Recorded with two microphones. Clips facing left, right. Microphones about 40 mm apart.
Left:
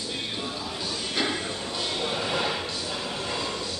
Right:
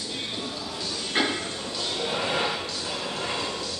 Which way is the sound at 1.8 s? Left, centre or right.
Centre.